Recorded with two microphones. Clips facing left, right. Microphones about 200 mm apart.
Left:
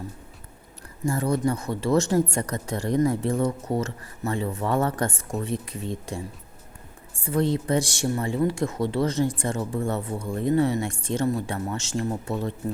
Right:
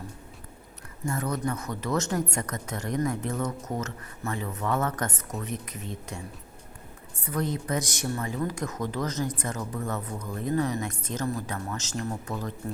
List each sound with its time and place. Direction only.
1.0 s a woman's voice: 30° left (ahead or behind)